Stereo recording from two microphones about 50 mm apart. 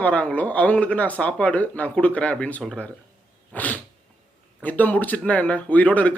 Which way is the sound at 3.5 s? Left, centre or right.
Left.